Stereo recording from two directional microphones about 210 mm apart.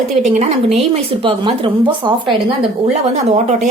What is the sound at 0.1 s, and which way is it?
A woman's voice, 35° right (ahead or behind).